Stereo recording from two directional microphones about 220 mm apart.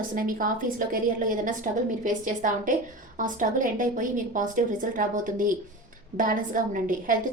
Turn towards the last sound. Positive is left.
turn(degrees=-40)  # may be behind; listen again after turning